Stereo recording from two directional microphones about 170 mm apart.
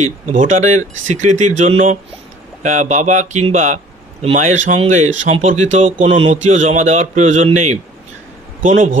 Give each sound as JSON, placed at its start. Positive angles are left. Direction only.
{"t": 0.0, "sound": "speech", "side_deg": -45}
{"t": 6.0, "sound": "a man's voice", "side_deg": -35}